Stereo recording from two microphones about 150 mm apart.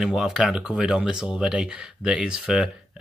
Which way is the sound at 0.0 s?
5° right (ahead or behind).